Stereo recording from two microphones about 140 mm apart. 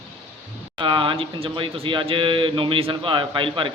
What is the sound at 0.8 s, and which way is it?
Speech, 35° right (ahead or behind).